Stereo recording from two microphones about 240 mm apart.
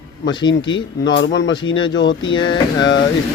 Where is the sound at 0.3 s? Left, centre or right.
Centre.